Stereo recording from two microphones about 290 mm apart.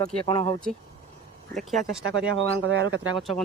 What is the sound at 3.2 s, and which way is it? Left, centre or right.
Speech, centre.